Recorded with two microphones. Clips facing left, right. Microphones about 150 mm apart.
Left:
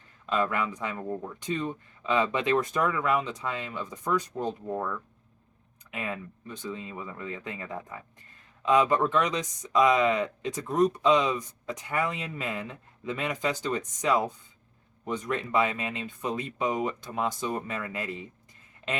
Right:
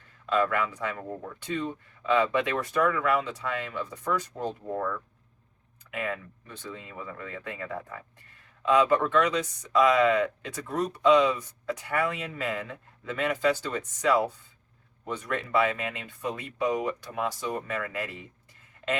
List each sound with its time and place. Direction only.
0.3 s speech: 20° left (ahead or behind)
2.0 s speech: 20° left (ahead or behind)